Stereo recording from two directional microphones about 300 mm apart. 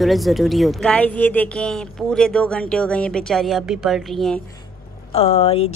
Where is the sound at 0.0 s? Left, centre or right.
Centre.